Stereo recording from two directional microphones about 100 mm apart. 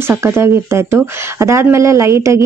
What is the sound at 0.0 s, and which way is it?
Speech, 25° right (ahead or behind).